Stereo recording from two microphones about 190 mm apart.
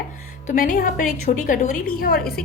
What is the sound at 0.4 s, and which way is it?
A woman's voice, 45° left (ahead or behind).